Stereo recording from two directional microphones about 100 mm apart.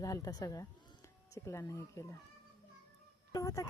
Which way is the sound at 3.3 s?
35° left (ahead or behind).